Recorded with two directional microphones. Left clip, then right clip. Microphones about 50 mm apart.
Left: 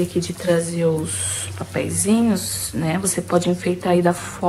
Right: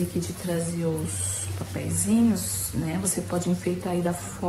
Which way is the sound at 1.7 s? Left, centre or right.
Centre.